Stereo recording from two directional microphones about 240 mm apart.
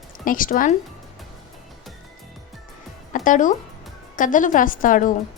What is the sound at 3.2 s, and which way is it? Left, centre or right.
Speech, left.